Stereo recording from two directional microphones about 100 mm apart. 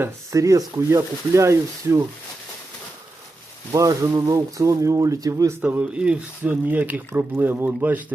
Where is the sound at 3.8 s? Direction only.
35° right (ahead or behind).